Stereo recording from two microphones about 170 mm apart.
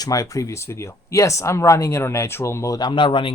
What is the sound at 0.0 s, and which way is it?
Speech, 20° left (ahead or behind).